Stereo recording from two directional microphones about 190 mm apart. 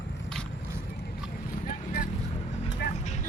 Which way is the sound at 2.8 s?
60° left (ahead or behind).